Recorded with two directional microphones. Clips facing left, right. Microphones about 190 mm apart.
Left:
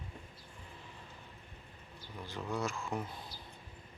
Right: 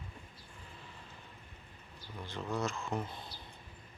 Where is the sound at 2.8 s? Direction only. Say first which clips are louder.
Right 1 dB; centre (ahead or behind).